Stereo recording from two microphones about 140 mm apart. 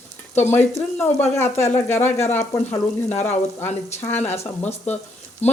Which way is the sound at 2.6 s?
55° left (ahead or behind).